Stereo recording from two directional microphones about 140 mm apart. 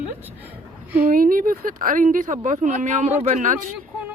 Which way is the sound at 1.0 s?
90° right.